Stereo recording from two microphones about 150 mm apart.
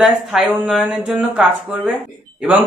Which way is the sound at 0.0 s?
Centre (ahead or behind).